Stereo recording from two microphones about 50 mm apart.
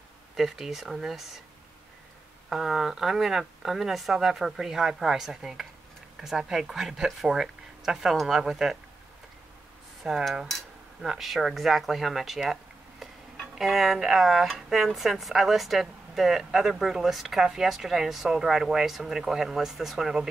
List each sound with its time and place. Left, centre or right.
0.4 s speech: centre
2.5 s speech: centre
10.0 s speech: centre
11.0 s speech: centre
13.6 s speech: centre